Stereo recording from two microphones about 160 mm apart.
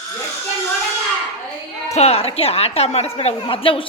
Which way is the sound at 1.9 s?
40° left (ahead or behind).